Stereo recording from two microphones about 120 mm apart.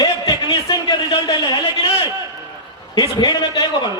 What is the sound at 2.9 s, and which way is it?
Speech, 35° left (ahead or behind).